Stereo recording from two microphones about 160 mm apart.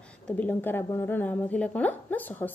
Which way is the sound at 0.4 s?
10° left (ahead or behind).